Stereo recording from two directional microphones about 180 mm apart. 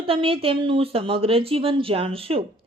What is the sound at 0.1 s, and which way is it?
Speech, 30° right (ahead or behind).